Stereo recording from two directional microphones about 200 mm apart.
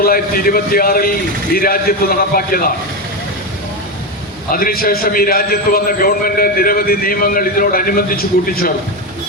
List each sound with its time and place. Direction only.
0.0 s a man's voice: 45° left (ahead or behind)
4.5 s a man's voice: 45° left (ahead or behind)